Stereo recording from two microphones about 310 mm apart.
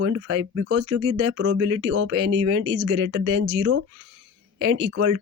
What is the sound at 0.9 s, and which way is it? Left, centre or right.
Speech, right.